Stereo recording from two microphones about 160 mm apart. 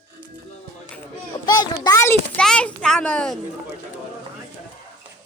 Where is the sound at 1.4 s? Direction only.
25° left (ahead or behind); by 3.4 s 5° left (ahead or behind).